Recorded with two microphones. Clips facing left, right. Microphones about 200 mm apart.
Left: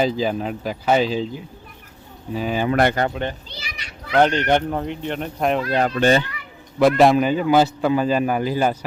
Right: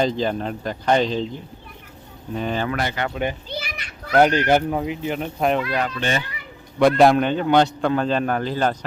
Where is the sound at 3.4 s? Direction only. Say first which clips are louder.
Right 7 dB; 50° right (ahead or behind).